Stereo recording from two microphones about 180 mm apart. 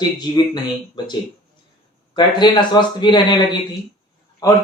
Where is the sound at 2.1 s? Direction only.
25° left (ahead or behind).